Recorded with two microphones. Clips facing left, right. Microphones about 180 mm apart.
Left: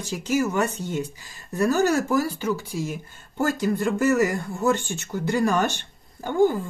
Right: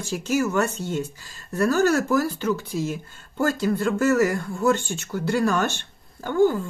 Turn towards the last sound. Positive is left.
turn(degrees=15)  # may be behind; listen again after turning